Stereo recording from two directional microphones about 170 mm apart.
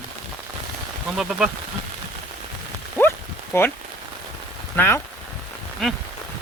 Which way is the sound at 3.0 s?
15° left (ahead or behind).